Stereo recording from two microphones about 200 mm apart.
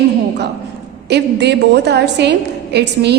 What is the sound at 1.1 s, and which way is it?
A woman's voice, 55° right (ahead or behind).